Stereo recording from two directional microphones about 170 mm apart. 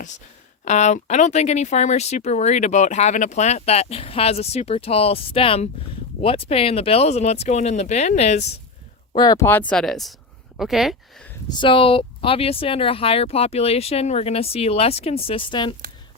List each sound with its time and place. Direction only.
0.6 s speech: 40° left (ahead or behind)
9.1 s speech: 25° left (ahead or behind)
9.5 s speech: 10° left (ahead or behind)
11.4 s speech: 25° left (ahead or behind)